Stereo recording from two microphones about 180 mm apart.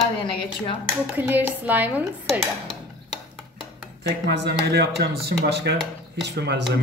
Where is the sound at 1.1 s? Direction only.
10° right (ahead or behind).